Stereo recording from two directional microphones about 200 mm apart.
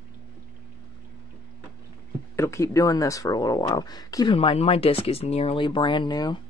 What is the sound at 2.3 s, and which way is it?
Speech, 15° left (ahead or behind).